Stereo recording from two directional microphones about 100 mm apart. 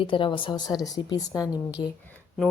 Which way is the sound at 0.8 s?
35° left (ahead or behind).